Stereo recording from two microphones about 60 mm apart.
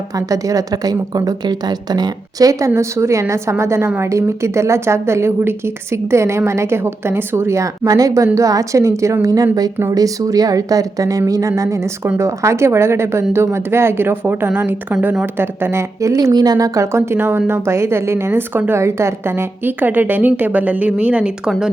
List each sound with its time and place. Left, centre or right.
0.2 s a woman's voice: right
2.4 s a woman's voice: right
3.8 s a woman's voice: right
4.1 s a woman's voice: right
7.6 s speech: right
9.2 s a woman's voice: right
12.0 s a woman's voice: right
12.4 s a woman's voice: right
15.4 s a woman's voice: right
16.0 s a woman's voice: right
18.3 s a woman's voice: right
18.8 s a woman's voice: right; by 21.5 s centre